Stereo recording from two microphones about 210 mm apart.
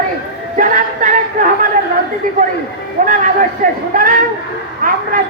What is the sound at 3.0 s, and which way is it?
A man's voice, 40° right (ahead or behind).